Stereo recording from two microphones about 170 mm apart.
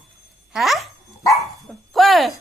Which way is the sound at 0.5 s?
Centre (ahead or behind).